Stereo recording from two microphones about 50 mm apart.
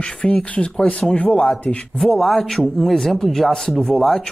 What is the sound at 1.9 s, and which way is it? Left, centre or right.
Speech, centre.